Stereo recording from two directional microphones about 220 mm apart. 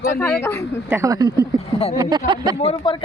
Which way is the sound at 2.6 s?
30° left (ahead or behind).